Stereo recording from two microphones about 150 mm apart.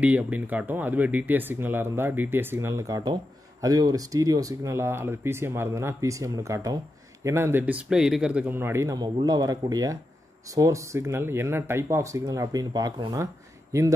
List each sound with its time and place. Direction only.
0.0 s speech: 10° right (ahead or behind)